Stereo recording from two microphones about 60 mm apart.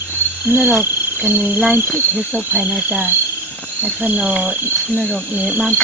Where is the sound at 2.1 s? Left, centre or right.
Centre.